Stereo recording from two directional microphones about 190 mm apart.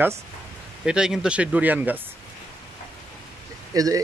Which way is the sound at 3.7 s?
20° right (ahead or behind).